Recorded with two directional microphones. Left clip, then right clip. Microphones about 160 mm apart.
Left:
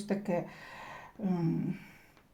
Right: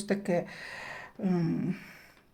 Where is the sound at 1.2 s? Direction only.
30° right (ahead or behind).